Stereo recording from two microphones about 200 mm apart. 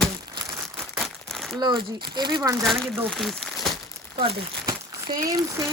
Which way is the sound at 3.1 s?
Centre (ahead or behind).